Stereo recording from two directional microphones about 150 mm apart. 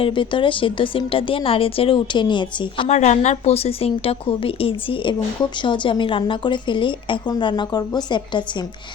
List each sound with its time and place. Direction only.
0.0 s a woman's voice: 35° left (ahead or behind)
2.9 s a woman's voice: 50° left (ahead or behind); by 8.6 s 30° left (ahead or behind)